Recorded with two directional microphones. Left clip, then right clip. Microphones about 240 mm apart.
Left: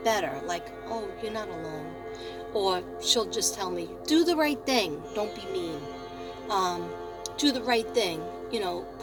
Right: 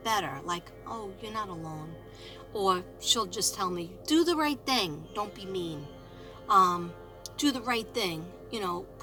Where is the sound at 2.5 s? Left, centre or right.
Centre.